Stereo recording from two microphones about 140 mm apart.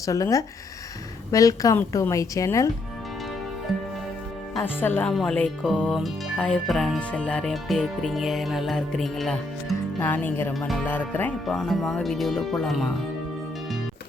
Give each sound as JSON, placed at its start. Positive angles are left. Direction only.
{"t": 0.0, "sound": "a woman's voice", "side_deg": 25}
{"t": 3.7, "sound": "music", "side_deg": 0}
{"t": 4.6, "sound": "speech", "side_deg": 15}
{"t": 10.0, "sound": "speech", "side_deg": 15}